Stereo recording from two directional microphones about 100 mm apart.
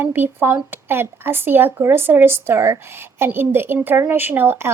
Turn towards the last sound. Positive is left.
turn(degrees=-25)  # may be behind; listen again after turning